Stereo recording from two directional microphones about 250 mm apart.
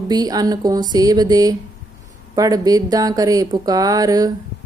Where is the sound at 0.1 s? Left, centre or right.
Centre.